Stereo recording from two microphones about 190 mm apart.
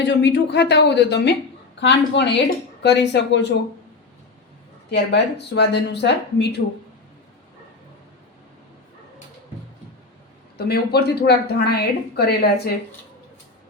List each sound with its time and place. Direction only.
0.0 s speech: 65° left (ahead or behind)
4.9 s speech: 60° left (ahead or behind)
10.6 s speech: 55° left (ahead or behind)